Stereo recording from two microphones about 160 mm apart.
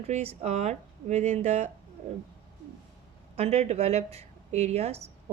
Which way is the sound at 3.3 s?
40° right (ahead or behind).